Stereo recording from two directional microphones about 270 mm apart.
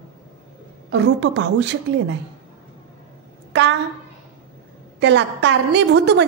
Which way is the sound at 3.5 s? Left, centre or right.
Right.